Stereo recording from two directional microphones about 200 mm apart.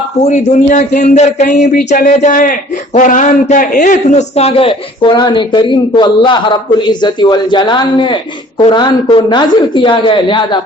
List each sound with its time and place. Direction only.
0.2 s speech: 35° left (ahead or behind)